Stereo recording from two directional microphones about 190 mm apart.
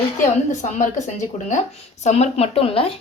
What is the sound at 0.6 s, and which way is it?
Speech, 40° left (ahead or behind).